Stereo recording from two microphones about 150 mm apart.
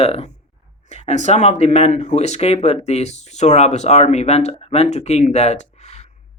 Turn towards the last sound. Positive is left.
turn(degrees=50)  # may be behind; listen again after turning